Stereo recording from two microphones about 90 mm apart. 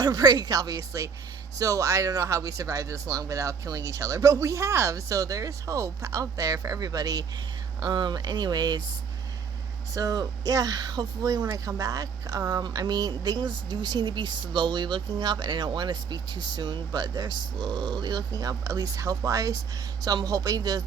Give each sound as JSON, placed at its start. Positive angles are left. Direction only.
{"t": 0.0, "sound": "speech", "side_deg": -45}
{"t": 9.9, "sound": "speech", "side_deg": -45}